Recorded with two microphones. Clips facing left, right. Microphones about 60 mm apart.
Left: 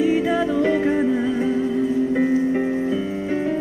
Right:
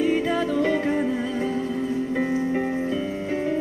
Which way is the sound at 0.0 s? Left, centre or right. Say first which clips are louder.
Left 3 dB; centre.